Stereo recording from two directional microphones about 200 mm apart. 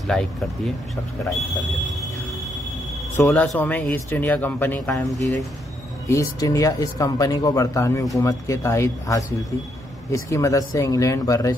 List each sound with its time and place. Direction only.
0.1 s speech: centre (ahead or behind)
3.2 s speech: 15° left (ahead or behind)
6.0 s speech: 15° left (ahead or behind)